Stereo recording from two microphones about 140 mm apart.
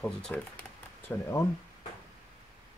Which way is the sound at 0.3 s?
15° left (ahead or behind).